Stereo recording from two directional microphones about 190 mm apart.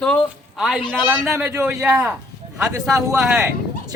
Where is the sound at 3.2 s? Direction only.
5° right (ahead or behind).